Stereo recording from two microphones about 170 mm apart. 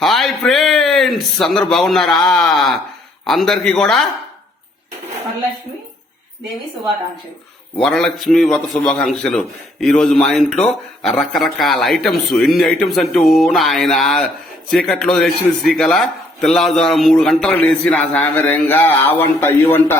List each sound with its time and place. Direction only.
0.0 s a sound: centre (ahead or behind)
2.3 s a man's voice: centre (ahead or behind)
7.8 s a man's voice: 5° left (ahead or behind)